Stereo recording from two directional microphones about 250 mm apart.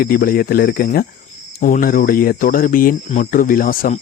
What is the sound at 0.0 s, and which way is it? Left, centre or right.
Speech, left.